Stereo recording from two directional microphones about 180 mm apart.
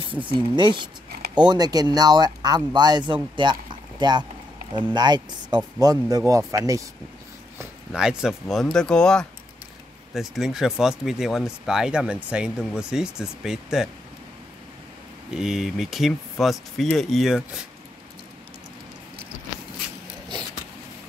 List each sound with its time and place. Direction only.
0.1 s speech: 30° right (ahead or behind)
7.5 s speech: 5° right (ahead or behind)
15.3 s speech: 5° right (ahead or behind)